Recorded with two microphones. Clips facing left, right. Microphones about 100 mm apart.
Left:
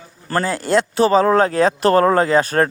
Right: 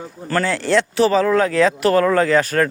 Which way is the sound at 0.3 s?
35° left (ahead or behind).